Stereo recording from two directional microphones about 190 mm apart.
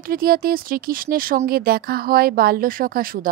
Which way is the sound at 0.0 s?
50° right (ahead or behind).